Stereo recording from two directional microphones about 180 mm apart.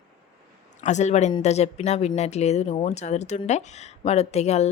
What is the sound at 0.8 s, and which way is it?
Speech, 40° left (ahead or behind).